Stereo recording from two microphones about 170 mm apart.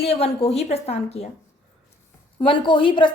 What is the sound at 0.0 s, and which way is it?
A woman's voice, 35° left (ahead or behind).